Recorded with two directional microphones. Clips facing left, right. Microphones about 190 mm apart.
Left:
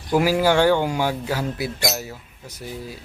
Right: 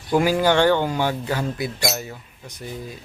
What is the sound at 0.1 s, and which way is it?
Speech, 5° left (ahead or behind).